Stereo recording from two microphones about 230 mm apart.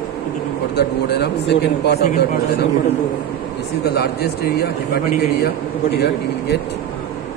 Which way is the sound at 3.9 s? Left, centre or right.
Left.